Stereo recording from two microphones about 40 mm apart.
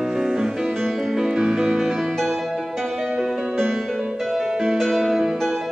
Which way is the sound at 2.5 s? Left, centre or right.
Centre.